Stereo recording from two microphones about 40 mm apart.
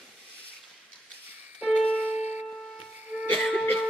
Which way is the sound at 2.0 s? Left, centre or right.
Right.